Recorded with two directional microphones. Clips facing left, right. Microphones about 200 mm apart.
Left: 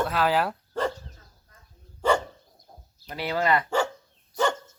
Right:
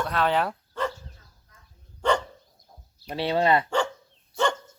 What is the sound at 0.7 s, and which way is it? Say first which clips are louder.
Dog: left 3 dB; 35° left (ahead or behind).